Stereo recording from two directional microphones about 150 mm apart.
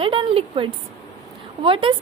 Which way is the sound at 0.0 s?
35° right (ahead or behind).